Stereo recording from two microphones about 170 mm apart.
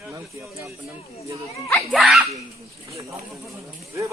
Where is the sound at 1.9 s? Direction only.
Centre (ahead or behind).